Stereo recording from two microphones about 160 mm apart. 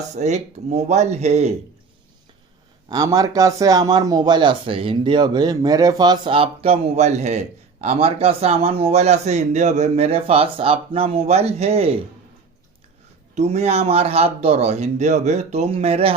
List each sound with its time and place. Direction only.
0.2 s speech: 45° right (ahead or behind)
2.9 s speech: 20° right (ahead or behind); by 11.9 s 40° right (ahead or behind)
13.3 s speech: 40° right (ahead or behind)